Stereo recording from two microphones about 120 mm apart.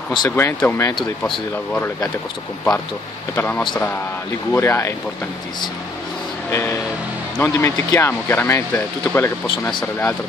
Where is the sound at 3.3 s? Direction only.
15° left (ahead or behind).